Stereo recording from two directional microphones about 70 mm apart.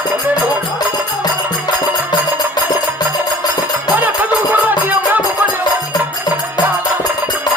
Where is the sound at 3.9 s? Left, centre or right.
Right.